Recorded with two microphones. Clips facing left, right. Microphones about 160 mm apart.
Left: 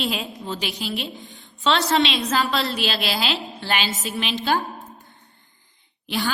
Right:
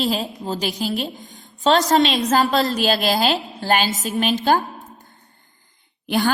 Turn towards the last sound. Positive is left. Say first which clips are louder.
# right 6 dB
turn(degrees=-50)  # may be behind; listen again after turning